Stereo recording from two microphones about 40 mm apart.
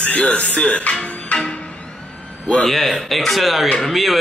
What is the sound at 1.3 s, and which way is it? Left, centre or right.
Music, left.